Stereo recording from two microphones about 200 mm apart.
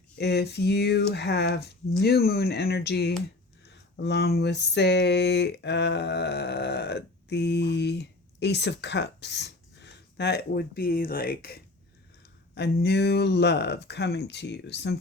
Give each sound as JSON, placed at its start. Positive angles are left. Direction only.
{"t": 0.2, "sound": "speech", "side_deg": 55}
{"t": 3.7, "sound": "a sound", "side_deg": 55}
{"t": 12.5, "sound": "speech", "side_deg": 55}